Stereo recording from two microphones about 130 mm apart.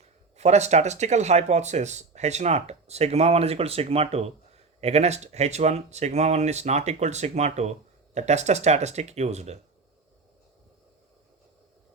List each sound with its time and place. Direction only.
0.0 s speech: 60° right (ahead or behind)